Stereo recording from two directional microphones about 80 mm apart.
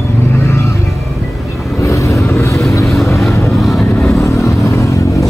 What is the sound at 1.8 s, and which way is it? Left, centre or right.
Vehicle, left.